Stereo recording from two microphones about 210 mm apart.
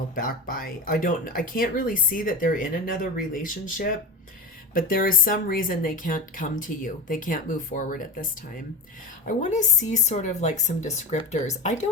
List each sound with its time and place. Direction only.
0.2 s speech: 40° left (ahead or behind)